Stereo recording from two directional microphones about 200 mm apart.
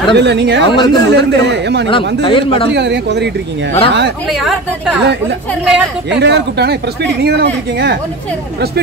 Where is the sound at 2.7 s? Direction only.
60° right (ahead or behind).